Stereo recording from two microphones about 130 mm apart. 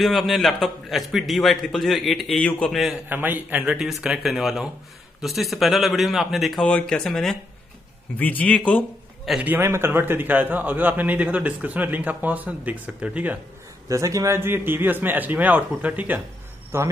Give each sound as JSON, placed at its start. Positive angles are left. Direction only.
{"t": 0.0, "sound": "a man's voice", "side_deg": 0}
{"t": 3.1, "sound": "a man's voice", "side_deg": -15}
{"t": 9.2, "sound": "a man's voice", "side_deg": -5}
{"t": 9.5, "sound": "a man's voice", "side_deg": -20}
{"t": 13.8, "sound": "a man's voice", "side_deg": -25}